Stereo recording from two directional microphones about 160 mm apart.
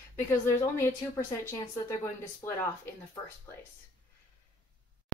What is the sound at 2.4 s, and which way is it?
Speech, 15° left (ahead or behind).